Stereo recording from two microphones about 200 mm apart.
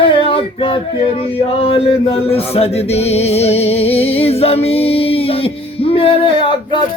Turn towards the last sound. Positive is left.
turn(degrees=25)  # may be behind; listen again after turning